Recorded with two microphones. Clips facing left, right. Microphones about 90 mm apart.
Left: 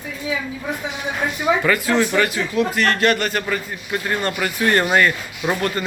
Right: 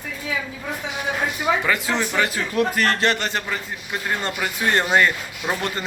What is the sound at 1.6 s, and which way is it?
Speech, 20° right (ahead or behind).